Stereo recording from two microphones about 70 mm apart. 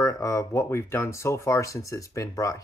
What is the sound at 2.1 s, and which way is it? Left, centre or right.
Speech, left.